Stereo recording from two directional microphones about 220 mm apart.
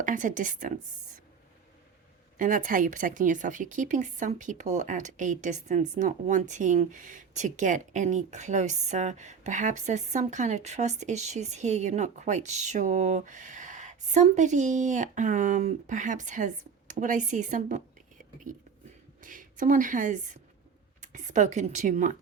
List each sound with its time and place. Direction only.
0.0 s speech: 35° right (ahead or behind)
2.4 s speech: 35° right (ahead or behind)
19.2 s speech: 35° right (ahead or behind)